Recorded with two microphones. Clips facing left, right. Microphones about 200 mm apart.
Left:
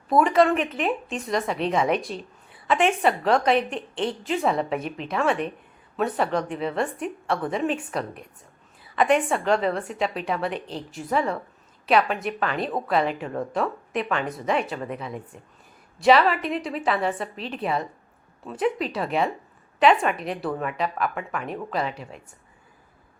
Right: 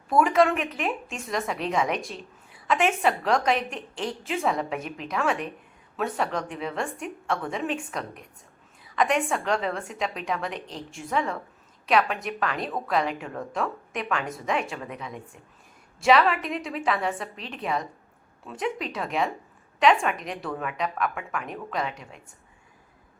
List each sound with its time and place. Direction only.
0.1 s a woman's voice: centre (ahead or behind)
9.0 s a woman's voice: 5° left (ahead or behind)
11.0 s speech: 40° left (ahead or behind)
11.9 s a woman's voice: centre (ahead or behind)